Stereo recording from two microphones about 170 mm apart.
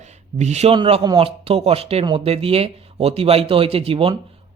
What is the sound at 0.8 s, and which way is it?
A man's voice, 30° right (ahead or behind).